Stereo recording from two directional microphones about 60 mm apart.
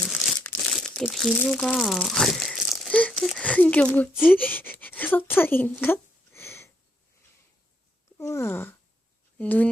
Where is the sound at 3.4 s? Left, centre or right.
Left.